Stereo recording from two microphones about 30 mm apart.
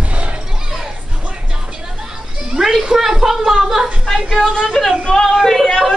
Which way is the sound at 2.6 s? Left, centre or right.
Right.